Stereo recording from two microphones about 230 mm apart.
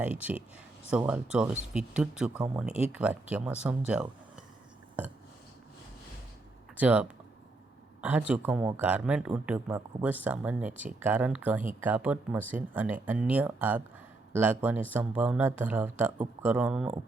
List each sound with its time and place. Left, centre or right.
0.0 s speech: centre
2.6 s speech: left
2.9 s speech: centre
6.7 s speech: centre
8.3 s speech: centre